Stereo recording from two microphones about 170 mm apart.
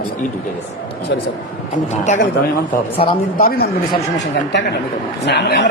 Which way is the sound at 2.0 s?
45° left (ahead or behind).